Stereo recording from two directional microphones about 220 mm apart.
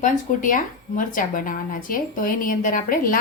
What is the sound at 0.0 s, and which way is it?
A woman's voice, 35° left (ahead or behind).